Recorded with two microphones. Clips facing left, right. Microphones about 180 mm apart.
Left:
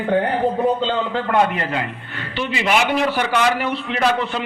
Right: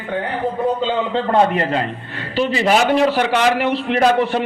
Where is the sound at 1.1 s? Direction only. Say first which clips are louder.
Right 4 dB; 30° right (ahead or behind).